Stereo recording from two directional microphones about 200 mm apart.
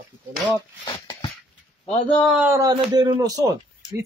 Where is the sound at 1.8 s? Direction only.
30° left (ahead or behind).